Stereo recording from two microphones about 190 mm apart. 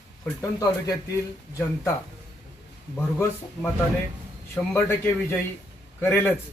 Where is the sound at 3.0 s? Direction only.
5° left (ahead or behind).